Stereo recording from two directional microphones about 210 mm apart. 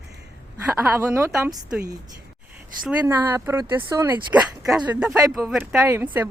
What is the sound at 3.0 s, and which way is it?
Speech, 10° right (ahead or behind).